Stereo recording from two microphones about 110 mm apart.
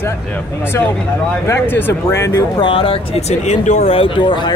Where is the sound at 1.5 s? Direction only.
20° left (ahead or behind).